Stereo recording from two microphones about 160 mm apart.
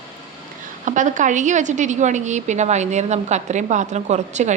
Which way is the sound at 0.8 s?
50° right (ahead or behind).